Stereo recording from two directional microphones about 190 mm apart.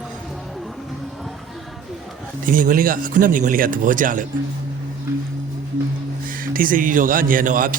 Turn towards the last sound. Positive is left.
turn(degrees=-45)  # may be behind; listen again after turning